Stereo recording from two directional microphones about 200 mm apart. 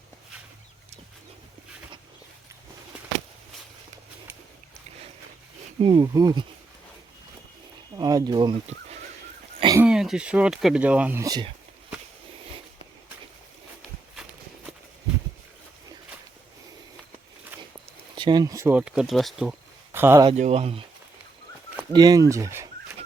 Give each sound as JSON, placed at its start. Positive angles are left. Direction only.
{"t": 5.8, "sound": "speech", "side_deg": -20}
{"t": 7.9, "sound": "speech", "side_deg": -20}
{"t": 9.6, "sound": "throat clearing", "side_deg": -20}
{"t": 9.8, "sound": "speech", "side_deg": -5}
{"t": 18.1, "sound": "speech", "side_deg": -25}
{"t": 20.2, "sound": "speech", "side_deg": -30}
{"t": 21.9, "sound": "speech", "side_deg": -20}